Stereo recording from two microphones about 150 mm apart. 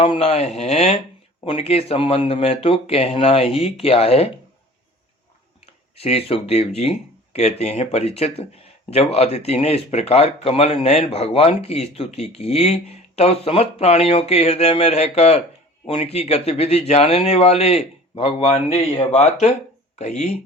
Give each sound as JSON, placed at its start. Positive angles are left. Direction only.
{"t": 0.0, "sound": "speech", "side_deg": 40}
{"t": 6.0, "sound": "speech", "side_deg": 40}